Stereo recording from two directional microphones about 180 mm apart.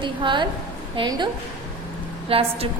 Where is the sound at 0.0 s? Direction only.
25° right (ahead or behind).